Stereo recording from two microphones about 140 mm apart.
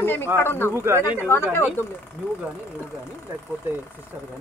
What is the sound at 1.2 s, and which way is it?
Speech, 15° left (ahead or behind).